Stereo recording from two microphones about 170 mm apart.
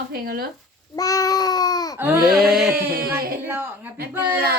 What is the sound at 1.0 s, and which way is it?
Babbling, 20° left (ahead or behind).